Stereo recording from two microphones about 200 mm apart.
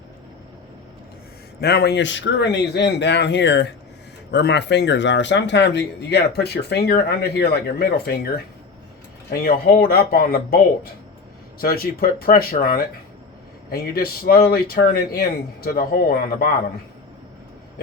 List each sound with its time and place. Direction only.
1.6 s speech: 55° left (ahead or behind)
9.3 s speech: 50° left (ahead or behind)
11.6 s speech: 50° left (ahead or behind)